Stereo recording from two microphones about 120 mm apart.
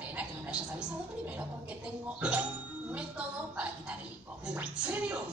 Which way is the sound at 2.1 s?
10° right (ahead or behind).